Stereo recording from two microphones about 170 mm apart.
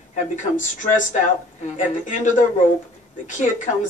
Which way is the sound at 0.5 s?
50° left (ahead or behind).